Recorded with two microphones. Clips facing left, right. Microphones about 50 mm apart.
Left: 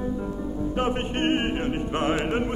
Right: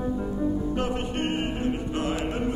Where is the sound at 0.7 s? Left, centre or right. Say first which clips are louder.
Left 2 dB; left.